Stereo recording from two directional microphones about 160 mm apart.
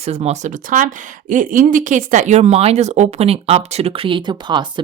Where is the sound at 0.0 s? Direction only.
40° right (ahead or behind).